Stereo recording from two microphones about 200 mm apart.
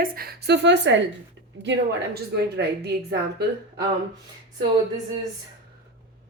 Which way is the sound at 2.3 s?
55° right (ahead or behind).